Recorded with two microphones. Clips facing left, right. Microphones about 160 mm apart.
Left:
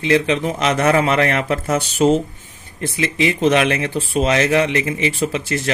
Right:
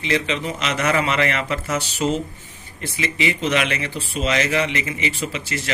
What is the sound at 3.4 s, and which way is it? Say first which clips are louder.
Speech: left 9 dB; 55° left (ahead or behind).